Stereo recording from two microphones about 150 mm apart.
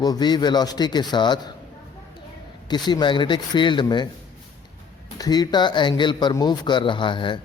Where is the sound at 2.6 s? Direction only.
30° left (ahead or behind).